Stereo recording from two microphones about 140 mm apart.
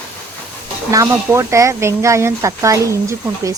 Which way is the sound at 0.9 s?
20° right (ahead or behind).